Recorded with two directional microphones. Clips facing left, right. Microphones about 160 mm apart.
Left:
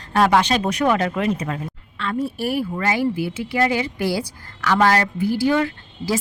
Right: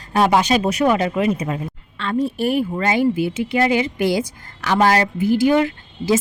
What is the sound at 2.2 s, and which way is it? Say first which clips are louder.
A woman's voice: right 4 dB; 20° right (ahead or behind).